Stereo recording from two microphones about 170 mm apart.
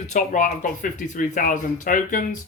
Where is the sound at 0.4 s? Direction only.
50° left (ahead or behind).